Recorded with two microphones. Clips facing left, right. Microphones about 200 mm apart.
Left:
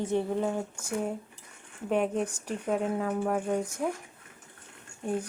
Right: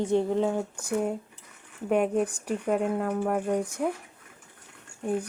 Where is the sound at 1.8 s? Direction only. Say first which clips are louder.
Right 3 dB; 5° right (ahead or behind).